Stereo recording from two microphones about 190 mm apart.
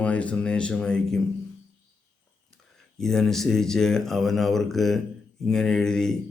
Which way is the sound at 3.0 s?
Centre (ahead or behind).